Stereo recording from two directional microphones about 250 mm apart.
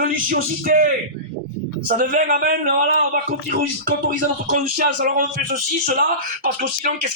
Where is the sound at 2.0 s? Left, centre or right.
Right.